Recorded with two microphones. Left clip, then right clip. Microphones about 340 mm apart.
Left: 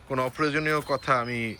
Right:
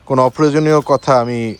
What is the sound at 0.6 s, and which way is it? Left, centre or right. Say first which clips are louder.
Speech: right 13 dB; right.